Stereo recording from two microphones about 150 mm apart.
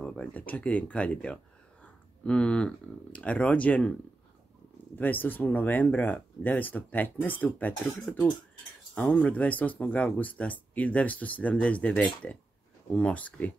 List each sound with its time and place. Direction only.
0.0 s speech: 10° left (ahead or behind)
4.9 s speech: 10° left (ahead or behind)